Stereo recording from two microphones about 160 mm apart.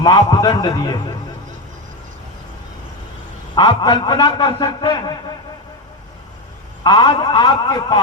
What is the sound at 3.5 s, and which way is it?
A man's voice, 30° left (ahead or behind).